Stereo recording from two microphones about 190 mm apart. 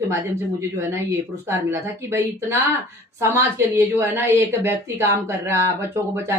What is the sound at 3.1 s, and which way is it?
A woman's voice, 15° right (ahead or behind).